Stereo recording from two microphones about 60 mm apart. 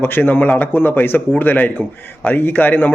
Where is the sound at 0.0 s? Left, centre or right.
Left.